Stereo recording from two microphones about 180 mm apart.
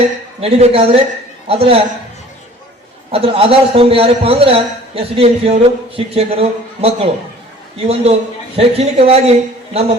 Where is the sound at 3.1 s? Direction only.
30° right (ahead or behind).